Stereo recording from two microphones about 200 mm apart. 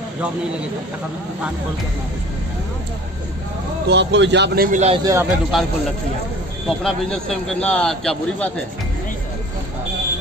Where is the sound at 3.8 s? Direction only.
60° right (ahead or behind).